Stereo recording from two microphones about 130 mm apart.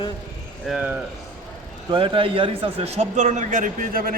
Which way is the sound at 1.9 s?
40° right (ahead or behind).